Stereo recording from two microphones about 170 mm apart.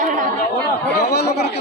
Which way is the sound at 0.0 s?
50° right (ahead or behind).